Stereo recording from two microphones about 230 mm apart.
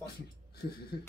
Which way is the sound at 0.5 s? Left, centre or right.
Left.